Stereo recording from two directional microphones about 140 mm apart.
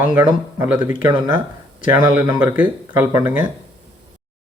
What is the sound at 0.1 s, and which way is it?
Speech, 30° right (ahead or behind).